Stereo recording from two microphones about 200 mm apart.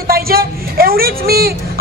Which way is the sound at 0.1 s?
50° right (ahead or behind).